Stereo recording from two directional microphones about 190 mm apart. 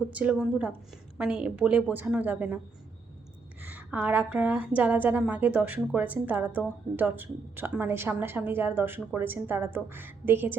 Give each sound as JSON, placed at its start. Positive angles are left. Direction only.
{"t": 0.1, "sound": "a woman's voice", "side_deg": -5}
{"t": 3.6, "sound": "a woman's voice", "side_deg": -10}